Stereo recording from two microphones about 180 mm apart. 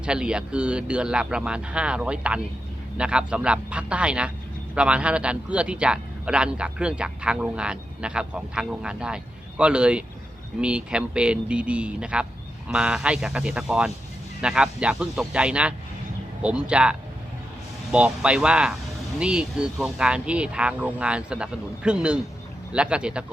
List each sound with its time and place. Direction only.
0.0 s a man's voice: 5° right (ahead or behind)